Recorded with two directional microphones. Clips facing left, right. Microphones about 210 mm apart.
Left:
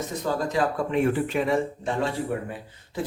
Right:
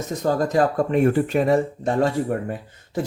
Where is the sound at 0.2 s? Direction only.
45° right (ahead or behind).